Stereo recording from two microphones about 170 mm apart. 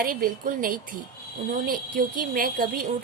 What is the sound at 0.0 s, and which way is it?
A woman's voice, 55° right (ahead or behind).